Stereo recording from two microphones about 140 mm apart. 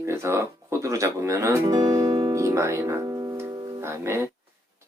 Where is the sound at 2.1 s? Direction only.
40° right (ahead or behind).